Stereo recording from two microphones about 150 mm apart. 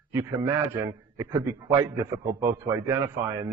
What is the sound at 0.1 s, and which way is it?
A man's voice, 20° right (ahead or behind).